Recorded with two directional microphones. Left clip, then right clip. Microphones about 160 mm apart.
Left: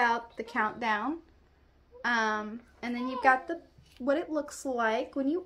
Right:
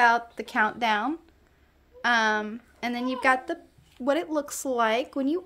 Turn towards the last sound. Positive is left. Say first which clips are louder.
# right 4 dB
turn(degrees=-55)  # may be behind; listen again after turning